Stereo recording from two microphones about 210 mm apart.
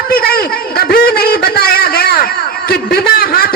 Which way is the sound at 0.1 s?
45° left (ahead or behind).